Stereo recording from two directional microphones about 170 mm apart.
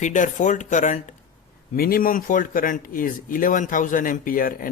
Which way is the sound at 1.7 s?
60° left (ahead or behind).